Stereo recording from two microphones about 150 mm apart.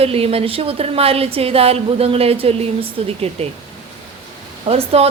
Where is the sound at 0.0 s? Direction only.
40° right (ahead or behind).